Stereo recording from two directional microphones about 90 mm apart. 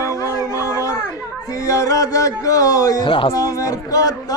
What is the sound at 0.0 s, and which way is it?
Music, 40° left (ahead or behind).